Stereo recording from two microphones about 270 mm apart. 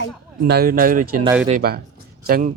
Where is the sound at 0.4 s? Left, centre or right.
Right.